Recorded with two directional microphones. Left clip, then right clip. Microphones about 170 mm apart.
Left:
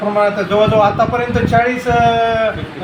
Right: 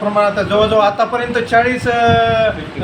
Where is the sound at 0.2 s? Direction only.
Centre (ahead or behind).